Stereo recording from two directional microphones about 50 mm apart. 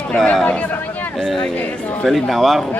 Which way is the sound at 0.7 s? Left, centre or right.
Left.